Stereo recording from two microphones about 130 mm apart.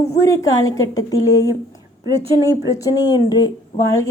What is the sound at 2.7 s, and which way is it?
Speech, 25° left (ahead or behind).